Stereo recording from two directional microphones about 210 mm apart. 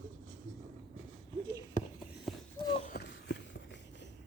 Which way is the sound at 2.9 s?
50° left (ahead or behind).